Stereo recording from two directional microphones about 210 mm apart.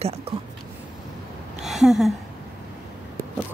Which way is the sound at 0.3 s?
30° right (ahead or behind).